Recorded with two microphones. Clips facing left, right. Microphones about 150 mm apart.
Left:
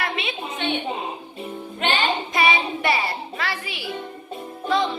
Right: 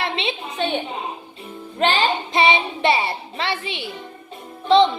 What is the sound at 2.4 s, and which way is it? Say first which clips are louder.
Child singing: right 4 dB; 25° right (ahead or behind).